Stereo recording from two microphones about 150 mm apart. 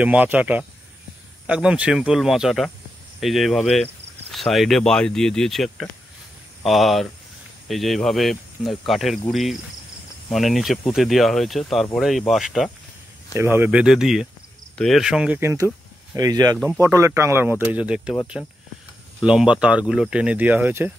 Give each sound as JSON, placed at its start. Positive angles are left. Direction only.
{"t": 0.0, "sound": "speech", "side_deg": -10}
{"t": 13.3, "sound": "speech", "side_deg": -15}
{"t": 16.2, "sound": "speech", "side_deg": -25}
{"t": 18.4, "sound": "speech", "side_deg": 10}
{"t": 19.2, "sound": "speech", "side_deg": -5}